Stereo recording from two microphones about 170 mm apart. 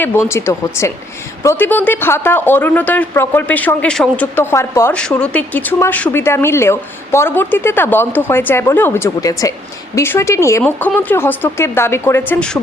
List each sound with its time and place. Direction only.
0.0 s speech: 15° left (ahead or behind)